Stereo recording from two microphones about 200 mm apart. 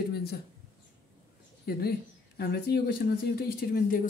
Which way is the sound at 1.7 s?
50° left (ahead or behind).